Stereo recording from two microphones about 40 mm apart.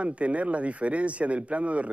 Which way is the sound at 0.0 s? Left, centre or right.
Right.